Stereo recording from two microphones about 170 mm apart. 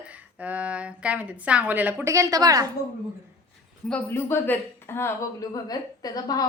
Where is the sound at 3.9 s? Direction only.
10° left (ahead or behind).